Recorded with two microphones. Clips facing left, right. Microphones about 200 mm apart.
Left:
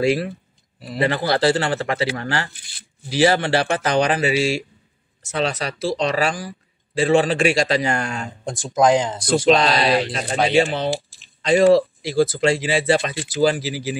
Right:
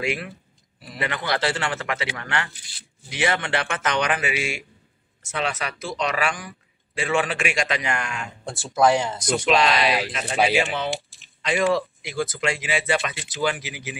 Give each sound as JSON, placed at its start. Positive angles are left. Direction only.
{"t": 0.0, "sound": "speech", "side_deg": 35}
{"t": 8.5, "sound": "speech", "side_deg": 15}
{"t": 9.3, "sound": "speech", "side_deg": 35}
{"t": 10.3, "sound": "speech", "side_deg": -5}
{"t": 10.6, "sound": "speech", "side_deg": 35}